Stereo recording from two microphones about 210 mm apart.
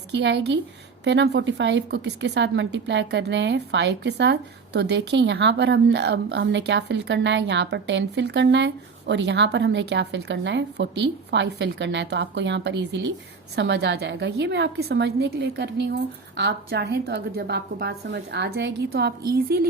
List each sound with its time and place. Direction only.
0.1 s a woman's voice: 55° right (ahead or behind)